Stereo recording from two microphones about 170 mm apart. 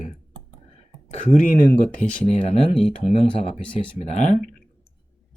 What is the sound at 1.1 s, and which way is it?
Speech, 50° left (ahead or behind).